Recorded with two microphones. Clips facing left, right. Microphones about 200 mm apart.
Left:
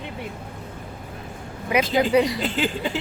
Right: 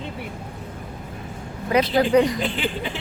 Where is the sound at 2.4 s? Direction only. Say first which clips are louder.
Left 1 dB; 40° left (ahead or behind).